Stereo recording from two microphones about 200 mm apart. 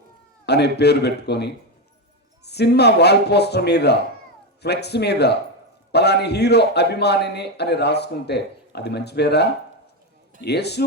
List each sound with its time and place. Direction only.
0.4 s a man's voice: 55° left (ahead or behind)